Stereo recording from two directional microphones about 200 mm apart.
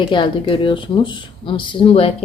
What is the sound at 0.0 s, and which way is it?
Speech, 25° left (ahead or behind).